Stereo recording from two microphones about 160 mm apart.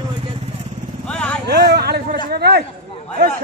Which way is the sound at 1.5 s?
85° right.